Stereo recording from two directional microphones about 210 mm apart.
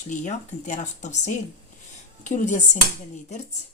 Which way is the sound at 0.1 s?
35° left (ahead or behind).